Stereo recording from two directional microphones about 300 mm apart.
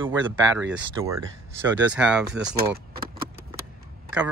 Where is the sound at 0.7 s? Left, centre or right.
Centre.